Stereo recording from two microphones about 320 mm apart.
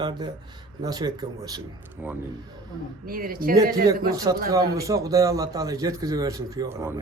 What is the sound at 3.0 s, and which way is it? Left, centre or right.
Speech, right.